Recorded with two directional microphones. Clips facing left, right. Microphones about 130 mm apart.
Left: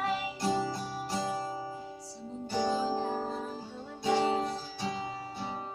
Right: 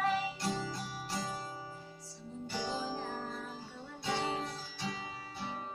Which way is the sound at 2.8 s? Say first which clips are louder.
Left 8 dB; 20° left (ahead or behind).